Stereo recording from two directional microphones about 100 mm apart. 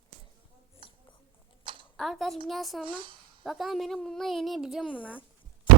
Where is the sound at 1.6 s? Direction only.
55° right (ahead or behind).